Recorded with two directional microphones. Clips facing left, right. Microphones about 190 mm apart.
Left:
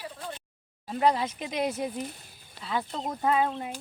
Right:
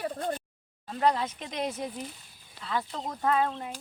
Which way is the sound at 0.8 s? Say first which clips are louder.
Left 2 dB; 10° left (ahead or behind).